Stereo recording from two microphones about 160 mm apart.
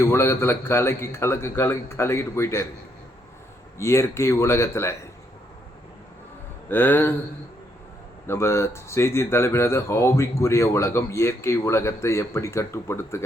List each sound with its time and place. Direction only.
0.0 s speech: 15° left (ahead or behind)
3.8 s speech: 15° left (ahead or behind)
6.7 s speech: 10° left (ahead or behind)
8.3 s speech: 15° left (ahead or behind)